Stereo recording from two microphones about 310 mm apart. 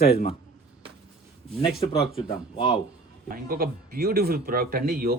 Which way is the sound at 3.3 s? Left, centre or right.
Right.